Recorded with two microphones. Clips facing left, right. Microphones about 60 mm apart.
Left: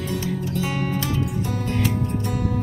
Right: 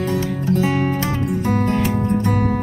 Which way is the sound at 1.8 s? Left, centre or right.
Right.